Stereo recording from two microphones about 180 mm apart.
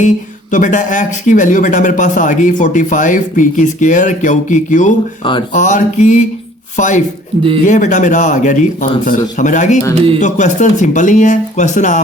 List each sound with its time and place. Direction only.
0.5 s speech: 45° left (ahead or behind)